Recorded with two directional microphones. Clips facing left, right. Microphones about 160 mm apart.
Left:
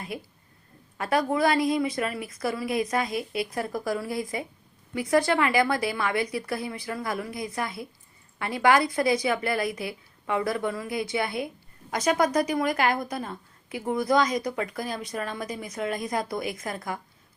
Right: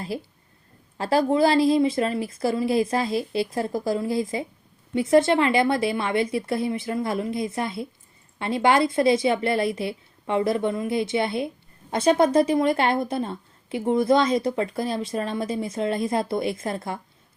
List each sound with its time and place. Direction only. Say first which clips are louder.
0.1 s a woman's voice: right 5 dB; 30° right (ahead or behind)